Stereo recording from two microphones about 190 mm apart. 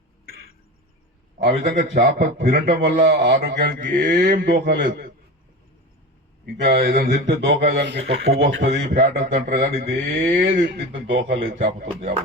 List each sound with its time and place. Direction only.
1.4 s a man's voice: 55° right (ahead or behind)
6.4 s a man's voice: 60° right (ahead or behind)
8.7 s speech: 45° right (ahead or behind)
9.5 s speech: 55° right (ahead or behind)
10.7 s speech: 75° right (ahead or behind)
11.5 s speech: 45° right (ahead or behind)